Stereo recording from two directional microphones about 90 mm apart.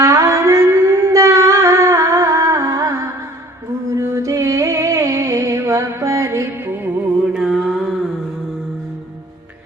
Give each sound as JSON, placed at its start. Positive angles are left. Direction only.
{"t": 0.0, "sound": "music", "side_deg": -35}
{"t": 7.3, "sound": "mantra", "side_deg": -5}